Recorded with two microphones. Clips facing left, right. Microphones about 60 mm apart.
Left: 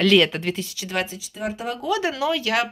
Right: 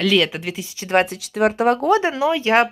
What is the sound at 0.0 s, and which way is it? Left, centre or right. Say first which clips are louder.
Speech: left 1 dB; centre.